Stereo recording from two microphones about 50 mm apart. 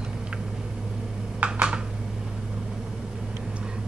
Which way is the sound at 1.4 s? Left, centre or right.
Right.